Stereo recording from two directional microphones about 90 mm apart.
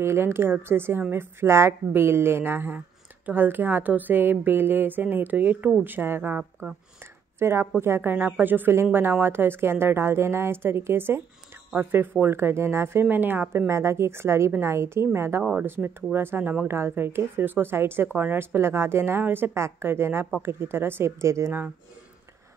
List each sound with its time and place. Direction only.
0.0 s speech: 30° right (ahead or behind)